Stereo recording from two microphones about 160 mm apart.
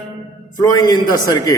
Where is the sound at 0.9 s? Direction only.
25° left (ahead or behind).